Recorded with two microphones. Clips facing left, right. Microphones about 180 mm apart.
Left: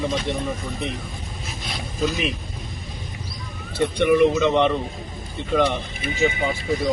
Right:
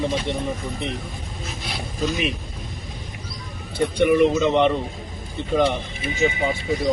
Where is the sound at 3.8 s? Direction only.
Centre (ahead or behind).